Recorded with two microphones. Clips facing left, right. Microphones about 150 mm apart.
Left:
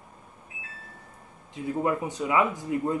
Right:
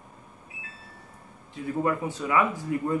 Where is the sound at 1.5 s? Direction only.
20° left (ahead or behind).